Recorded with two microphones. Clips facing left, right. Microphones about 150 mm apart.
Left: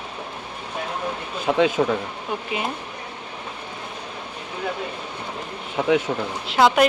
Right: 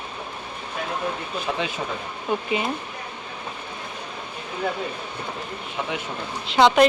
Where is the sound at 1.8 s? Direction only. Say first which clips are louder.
Left 9 dB; 80° left.